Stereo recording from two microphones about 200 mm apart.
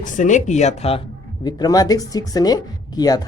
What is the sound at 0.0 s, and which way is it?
Speech, 40° left (ahead or behind).